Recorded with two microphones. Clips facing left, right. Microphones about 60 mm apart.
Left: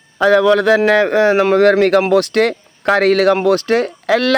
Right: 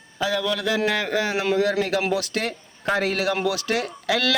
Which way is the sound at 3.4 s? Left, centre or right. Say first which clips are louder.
Left 10 dB; left.